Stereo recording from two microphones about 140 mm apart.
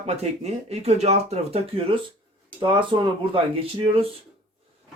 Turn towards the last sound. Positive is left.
turn(degrees=-40)  # may be behind; listen again after turning